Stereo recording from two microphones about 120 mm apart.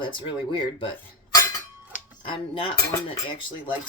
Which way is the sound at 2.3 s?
45° left (ahead or behind).